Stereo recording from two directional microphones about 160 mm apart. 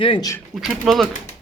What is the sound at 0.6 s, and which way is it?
Speech, centre (ahead or behind).